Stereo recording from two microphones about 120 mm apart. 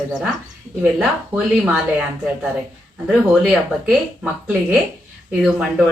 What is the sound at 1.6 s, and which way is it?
Speech, 10° right (ahead or behind).